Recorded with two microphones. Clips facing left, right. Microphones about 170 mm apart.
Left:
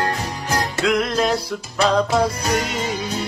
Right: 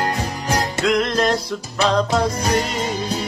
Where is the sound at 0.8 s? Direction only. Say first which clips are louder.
Even; 5° left (ahead or behind).